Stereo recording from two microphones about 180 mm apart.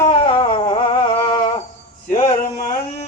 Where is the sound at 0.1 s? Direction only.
25° left (ahead or behind).